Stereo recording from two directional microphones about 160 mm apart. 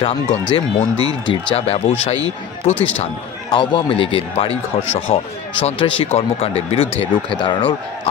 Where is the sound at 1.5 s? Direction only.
40° left (ahead or behind).